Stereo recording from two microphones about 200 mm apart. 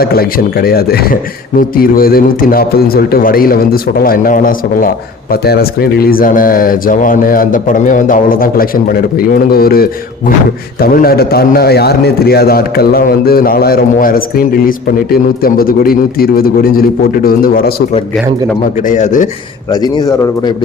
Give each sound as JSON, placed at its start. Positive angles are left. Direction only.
{"t": 0.0, "sound": "a man's voice", "side_deg": 50}
{"t": 18.9, "sound": "speech", "side_deg": 40}
{"t": 19.7, "sound": "a man's voice", "side_deg": 20}